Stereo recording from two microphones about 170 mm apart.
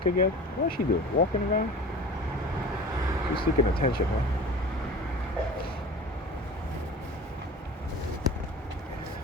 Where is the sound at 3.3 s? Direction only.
65° left (ahead or behind).